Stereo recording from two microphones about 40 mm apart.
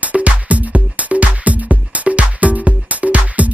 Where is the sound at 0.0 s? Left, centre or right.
Right.